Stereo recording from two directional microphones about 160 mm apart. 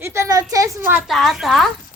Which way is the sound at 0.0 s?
15° right (ahead or behind).